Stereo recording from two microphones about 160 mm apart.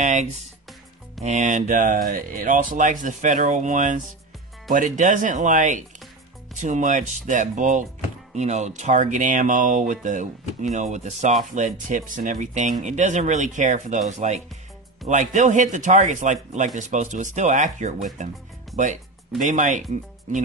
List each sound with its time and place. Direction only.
0.0 s music: 50° right (ahead or behind)
1.2 s speech: 50° right (ahead or behind)
19.4 s speech: 50° right (ahead or behind)